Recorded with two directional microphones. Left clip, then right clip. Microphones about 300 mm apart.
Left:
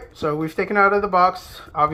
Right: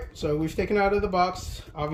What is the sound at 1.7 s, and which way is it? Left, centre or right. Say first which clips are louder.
Speech: left 13 dB; left.